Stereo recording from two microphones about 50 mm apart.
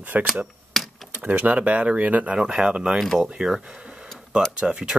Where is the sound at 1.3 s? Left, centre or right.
Right.